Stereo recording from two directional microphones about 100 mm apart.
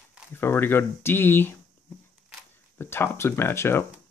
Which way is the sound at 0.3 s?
20° left (ahead or behind).